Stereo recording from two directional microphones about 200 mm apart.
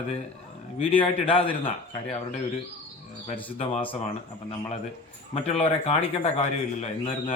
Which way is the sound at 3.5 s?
30° left (ahead or behind).